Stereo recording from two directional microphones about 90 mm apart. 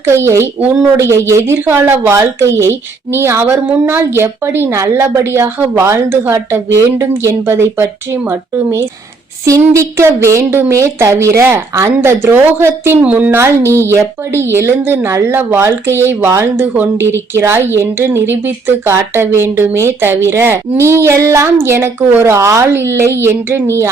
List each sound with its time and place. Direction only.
0.0 s speech: 30° right (ahead or behind)